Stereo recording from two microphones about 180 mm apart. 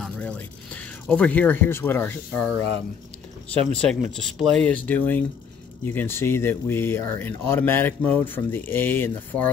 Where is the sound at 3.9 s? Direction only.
5° left (ahead or behind).